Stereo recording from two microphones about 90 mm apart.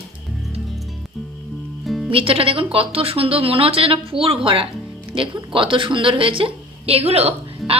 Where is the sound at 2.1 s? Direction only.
90° right.